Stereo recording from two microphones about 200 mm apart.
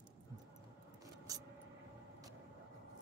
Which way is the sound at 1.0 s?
20° right (ahead or behind).